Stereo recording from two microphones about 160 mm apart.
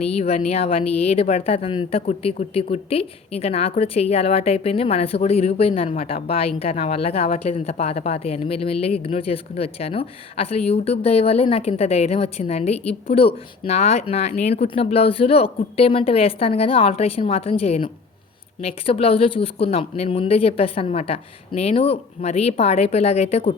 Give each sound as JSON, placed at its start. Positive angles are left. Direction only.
{"t": 0.0, "sound": "a woman's voice", "side_deg": 40}